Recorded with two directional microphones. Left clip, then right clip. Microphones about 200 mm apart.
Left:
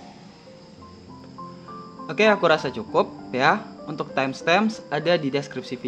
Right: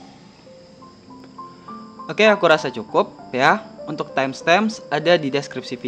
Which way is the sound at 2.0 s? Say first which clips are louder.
Right 4 dB; 15° right (ahead or behind).